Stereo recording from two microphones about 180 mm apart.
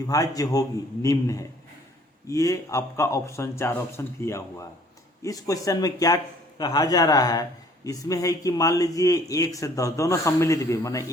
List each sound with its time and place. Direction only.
0.0 s a man's voice: 20° left (ahead or behind)